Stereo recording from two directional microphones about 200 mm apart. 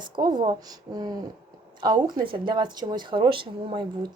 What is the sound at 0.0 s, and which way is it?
A woman's voice, 20° right (ahead or behind).